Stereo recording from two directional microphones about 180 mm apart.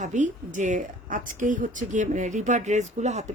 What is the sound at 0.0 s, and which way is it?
Speech, 45° right (ahead or behind).